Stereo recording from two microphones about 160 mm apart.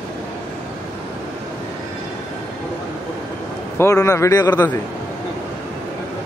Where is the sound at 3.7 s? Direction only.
20° left (ahead or behind).